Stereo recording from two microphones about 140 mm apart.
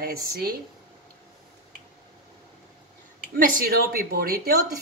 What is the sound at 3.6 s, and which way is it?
Speech, 90° right.